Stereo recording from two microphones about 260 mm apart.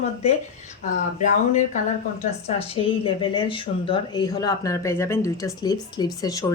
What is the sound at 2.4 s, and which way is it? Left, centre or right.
Speech, left.